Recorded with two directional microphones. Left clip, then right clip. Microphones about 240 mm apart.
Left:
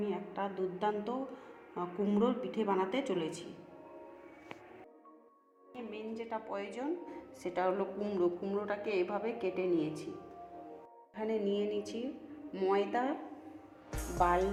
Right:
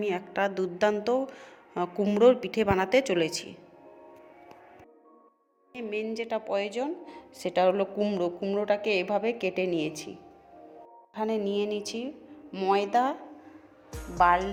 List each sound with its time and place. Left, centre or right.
0.1 s a sound: right
1.1 s speech: right
1.7 s a woman's voice: right
5.7 s a woman's voice: right
11.1 s a woman's voice: right